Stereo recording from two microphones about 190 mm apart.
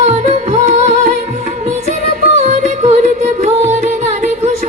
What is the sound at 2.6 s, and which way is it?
Music, 40° right (ahead or behind).